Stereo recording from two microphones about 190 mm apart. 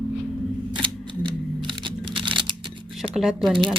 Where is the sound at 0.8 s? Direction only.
25° right (ahead or behind).